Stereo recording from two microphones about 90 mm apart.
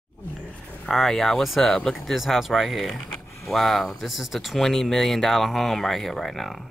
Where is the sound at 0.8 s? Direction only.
5° left (ahead or behind).